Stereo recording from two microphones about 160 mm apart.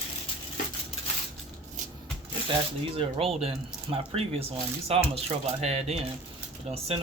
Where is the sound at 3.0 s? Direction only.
35° right (ahead or behind).